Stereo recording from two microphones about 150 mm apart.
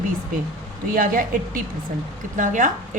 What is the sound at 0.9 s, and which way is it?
A woman's voice, 65° right (ahead or behind).